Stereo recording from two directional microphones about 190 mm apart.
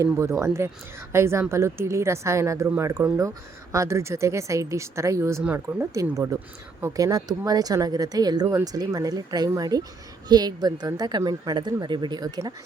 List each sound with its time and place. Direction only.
0.0 s a woman's voice: 15° right (ahead or behind)